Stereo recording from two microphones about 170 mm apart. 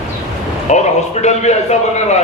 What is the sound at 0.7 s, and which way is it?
A man's voice, 40° left (ahead or behind).